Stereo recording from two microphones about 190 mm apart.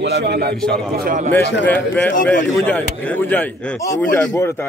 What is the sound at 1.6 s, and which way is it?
A man's voice, 10° left (ahead or behind).